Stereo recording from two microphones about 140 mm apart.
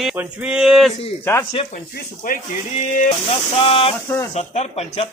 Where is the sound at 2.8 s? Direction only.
65° left (ahead or behind).